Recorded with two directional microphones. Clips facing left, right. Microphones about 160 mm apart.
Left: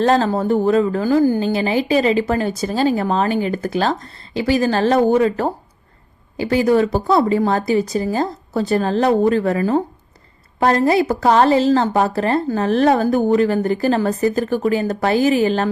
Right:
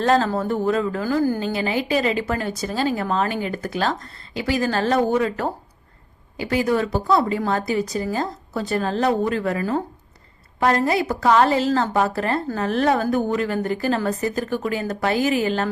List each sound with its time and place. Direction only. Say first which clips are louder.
0.0 s a woman's voice: left 3 dB; 30° left (ahead or behind)